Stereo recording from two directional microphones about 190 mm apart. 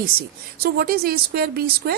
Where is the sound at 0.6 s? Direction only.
55° right (ahead or behind).